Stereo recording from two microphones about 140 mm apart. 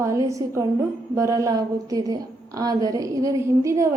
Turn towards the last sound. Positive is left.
turn(degrees=-20)  # may be behind; listen again after turning